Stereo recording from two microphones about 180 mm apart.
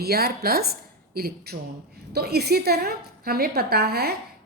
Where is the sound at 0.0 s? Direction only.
60° right (ahead or behind).